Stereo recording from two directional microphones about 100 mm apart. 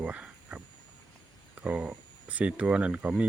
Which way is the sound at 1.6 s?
10° right (ahead or behind).